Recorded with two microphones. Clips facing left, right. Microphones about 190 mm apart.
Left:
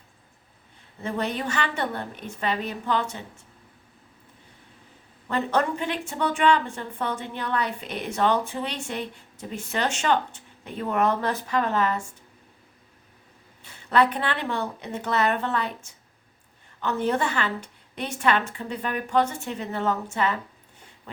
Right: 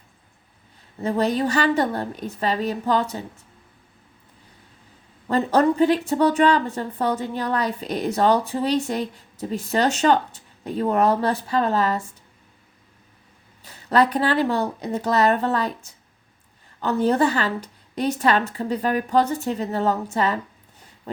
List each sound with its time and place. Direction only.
1.0 s a woman's voice: 35° right (ahead or behind)
5.3 s a woman's voice: 35° right (ahead or behind)
13.6 s a woman's voice: 40° right (ahead or behind)